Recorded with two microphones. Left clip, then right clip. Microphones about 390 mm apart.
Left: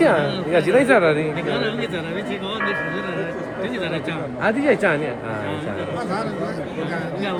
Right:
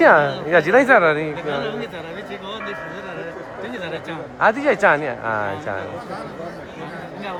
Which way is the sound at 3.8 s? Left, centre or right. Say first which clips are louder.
Left 3 dB; right.